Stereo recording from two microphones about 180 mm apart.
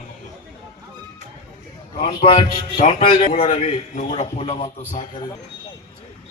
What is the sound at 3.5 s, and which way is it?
A man's voice, 40° left (ahead or behind).